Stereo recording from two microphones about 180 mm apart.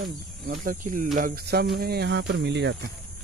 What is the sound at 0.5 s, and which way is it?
Speech, 45° right (ahead or behind).